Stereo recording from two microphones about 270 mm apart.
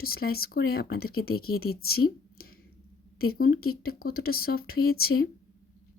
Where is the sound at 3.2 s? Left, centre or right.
Left.